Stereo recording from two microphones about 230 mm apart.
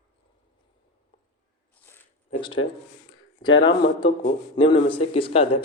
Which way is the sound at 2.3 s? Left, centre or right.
Left.